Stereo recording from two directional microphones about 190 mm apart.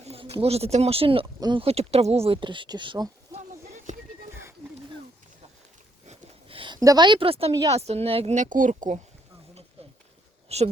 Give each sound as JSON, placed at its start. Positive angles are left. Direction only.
{"t": 0.0, "sound": "speech", "side_deg": -30}
{"t": 3.9, "sound": "music", "side_deg": -40}
{"t": 6.1, "sound": "a sound", "side_deg": -30}
{"t": 7.7, "sound": "speech", "side_deg": -35}
{"t": 10.5, "sound": "speech", "side_deg": -35}